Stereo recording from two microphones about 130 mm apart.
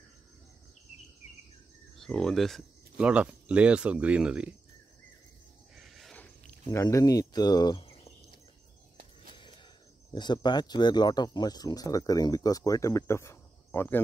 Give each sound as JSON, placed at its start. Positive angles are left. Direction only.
{"t": 2.0, "sound": "speech", "side_deg": 5}
{"t": 3.1, "sound": "speech", "side_deg": -10}
{"t": 5.8, "sound": "a sound", "side_deg": 0}
{"t": 6.7, "sound": "speech", "side_deg": 25}
{"t": 10.1, "sound": "speech", "side_deg": 35}